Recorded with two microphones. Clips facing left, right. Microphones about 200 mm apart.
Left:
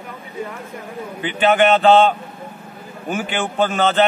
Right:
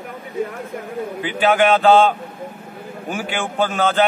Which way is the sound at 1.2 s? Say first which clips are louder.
Left 1 dB; 5° right (ahead or behind).